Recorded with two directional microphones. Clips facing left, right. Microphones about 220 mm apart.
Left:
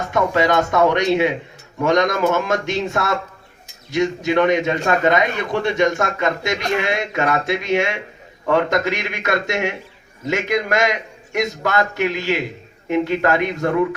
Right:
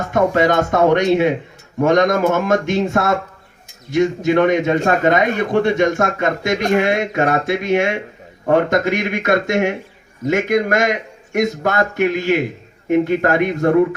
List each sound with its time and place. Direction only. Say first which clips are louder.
0.1 s a man's voice: right 3 dB; 50° right (ahead or behind)